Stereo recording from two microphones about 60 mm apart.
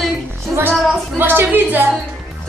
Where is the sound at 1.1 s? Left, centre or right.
Right.